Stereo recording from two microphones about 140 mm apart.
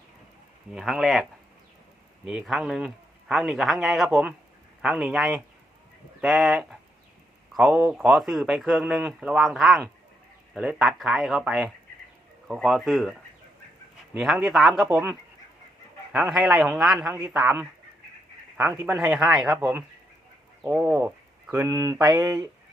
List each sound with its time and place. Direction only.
0.7 s speech: 5° right (ahead or behind)
14.2 s speech: centre (ahead or behind)
16.1 s speech: 5° right (ahead or behind)
18.7 s speech: 15° right (ahead or behind)